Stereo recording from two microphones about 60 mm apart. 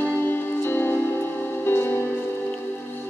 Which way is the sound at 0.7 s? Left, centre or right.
Left.